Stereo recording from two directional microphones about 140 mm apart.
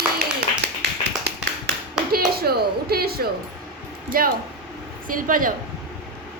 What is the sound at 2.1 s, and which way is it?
A woman's voice, 90° right.